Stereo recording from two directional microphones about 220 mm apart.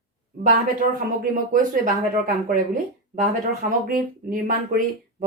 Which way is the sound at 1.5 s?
40° right (ahead or behind).